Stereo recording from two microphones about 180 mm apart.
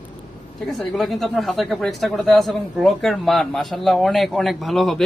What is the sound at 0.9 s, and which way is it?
Speech, centre (ahead or behind).